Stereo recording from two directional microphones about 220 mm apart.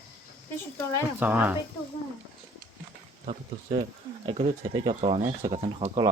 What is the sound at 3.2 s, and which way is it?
Speech, 30° right (ahead or behind).